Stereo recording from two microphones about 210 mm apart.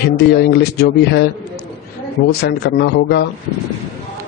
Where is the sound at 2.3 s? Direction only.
50° left (ahead or behind).